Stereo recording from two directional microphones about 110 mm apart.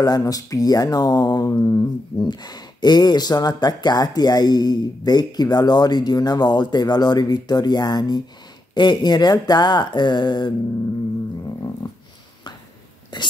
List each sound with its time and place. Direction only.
0.0 s speech: 35° left (ahead or behind)
1.5 s speech: 25° left (ahead or behind)
2.1 s speech: 40° left (ahead or behind)
13.1 s speech: 40° left (ahead or behind)